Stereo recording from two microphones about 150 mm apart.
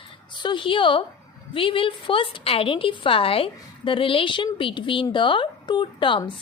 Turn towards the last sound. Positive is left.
turn(degrees=35)  # may be behind; listen again after turning